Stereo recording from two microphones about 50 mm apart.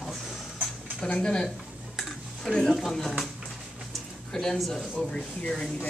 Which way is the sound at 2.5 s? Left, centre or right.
Centre.